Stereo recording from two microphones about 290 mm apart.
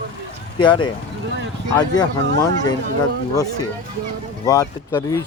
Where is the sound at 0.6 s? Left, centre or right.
Centre.